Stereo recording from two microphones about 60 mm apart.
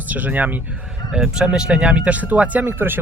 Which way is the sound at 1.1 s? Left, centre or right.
Centre.